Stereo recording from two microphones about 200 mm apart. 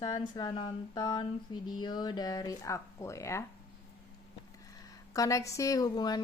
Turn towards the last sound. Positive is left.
turn(degrees=20)  # may be behind; listen again after turning